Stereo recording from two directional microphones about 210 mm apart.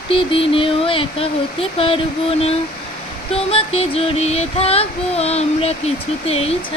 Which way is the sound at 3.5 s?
30° left (ahead or behind).